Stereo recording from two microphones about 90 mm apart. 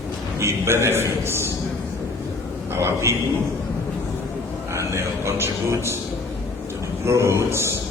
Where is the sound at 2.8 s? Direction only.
30° right (ahead or behind).